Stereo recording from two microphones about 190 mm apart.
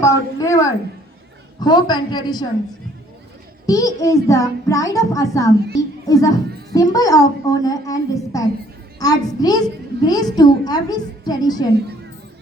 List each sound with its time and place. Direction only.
0.0 s a child's voice: 15° left (ahead or behind)
3.7 s a child's voice: 20° left (ahead or behind)